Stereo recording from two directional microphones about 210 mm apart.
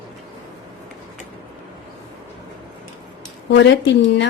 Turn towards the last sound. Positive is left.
turn(degrees=60)  # may be behind; listen again after turning